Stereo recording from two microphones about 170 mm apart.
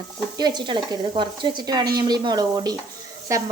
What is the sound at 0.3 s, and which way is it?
Speech, 25° right (ahead or behind).